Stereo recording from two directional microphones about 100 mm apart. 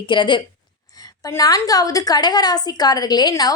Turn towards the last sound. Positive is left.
turn(degrees=40)  # may be behind; listen again after turning